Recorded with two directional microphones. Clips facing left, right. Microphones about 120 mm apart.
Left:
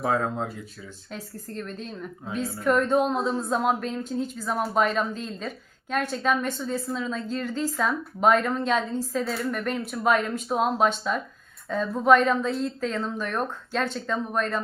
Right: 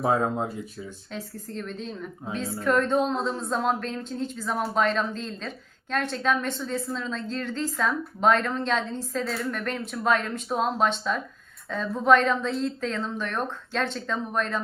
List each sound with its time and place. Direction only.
0.0 s speech: 20° right (ahead or behind)
1.1 s speech: centre (ahead or behind)